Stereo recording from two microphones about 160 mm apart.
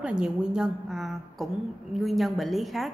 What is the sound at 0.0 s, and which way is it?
A woman's voice, 5° right (ahead or behind).